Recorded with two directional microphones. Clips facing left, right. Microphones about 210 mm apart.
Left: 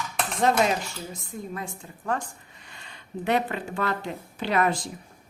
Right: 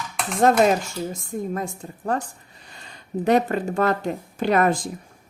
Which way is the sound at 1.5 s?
40° right (ahead or behind).